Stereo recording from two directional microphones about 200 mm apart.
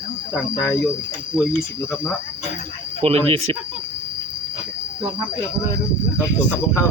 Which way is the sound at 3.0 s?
30° right (ahead or behind).